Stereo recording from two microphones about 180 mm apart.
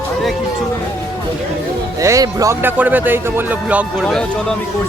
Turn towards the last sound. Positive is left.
turn(degrees=0)  # may be behind; listen again after turning